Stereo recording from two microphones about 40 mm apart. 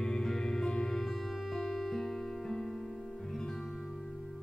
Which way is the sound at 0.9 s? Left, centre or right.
Centre.